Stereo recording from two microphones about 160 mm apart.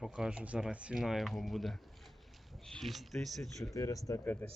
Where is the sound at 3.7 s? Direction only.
20° left (ahead or behind).